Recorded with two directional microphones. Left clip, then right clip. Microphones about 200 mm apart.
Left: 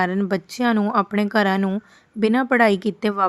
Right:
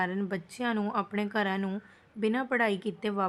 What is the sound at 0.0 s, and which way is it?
Speech, 40° left (ahead or behind).